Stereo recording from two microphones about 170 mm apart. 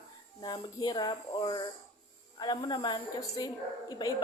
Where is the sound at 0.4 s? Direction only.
25° left (ahead or behind).